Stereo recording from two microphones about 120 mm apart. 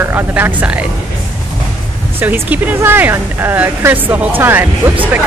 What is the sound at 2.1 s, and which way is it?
Speech, 15° right (ahead or behind).